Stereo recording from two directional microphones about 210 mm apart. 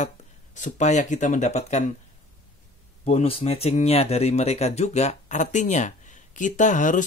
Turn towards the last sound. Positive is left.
turn(degrees=35)  # may be behind; listen again after turning